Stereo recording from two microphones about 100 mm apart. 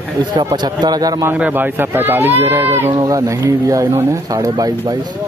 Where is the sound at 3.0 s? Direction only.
35° right (ahead or behind).